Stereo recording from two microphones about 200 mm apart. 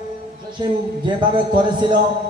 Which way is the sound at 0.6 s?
25° right (ahead or behind).